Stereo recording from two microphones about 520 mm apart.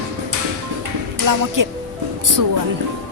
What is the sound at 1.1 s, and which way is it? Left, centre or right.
Speech, right.